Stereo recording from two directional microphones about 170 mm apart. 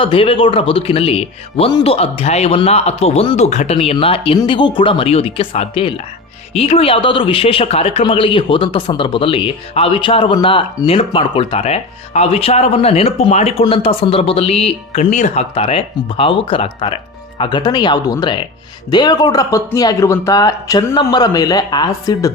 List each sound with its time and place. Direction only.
0.0 s speech: 35° left (ahead or behind)